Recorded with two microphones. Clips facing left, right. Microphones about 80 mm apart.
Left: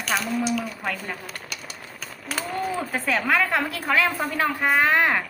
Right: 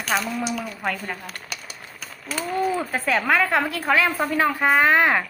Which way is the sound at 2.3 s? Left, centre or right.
Centre.